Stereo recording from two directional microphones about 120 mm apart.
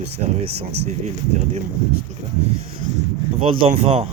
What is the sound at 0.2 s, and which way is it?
Speech, 90° right.